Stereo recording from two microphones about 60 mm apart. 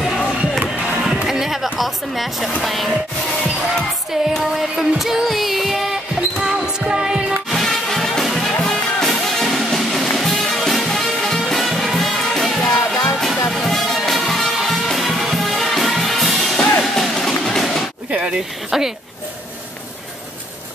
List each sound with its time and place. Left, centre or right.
0.5 s music: centre
4.1 s music: centre
7.5 s music: centre
12.6 s music: centre
13.5 s music: centre
18.1 s a sound: centre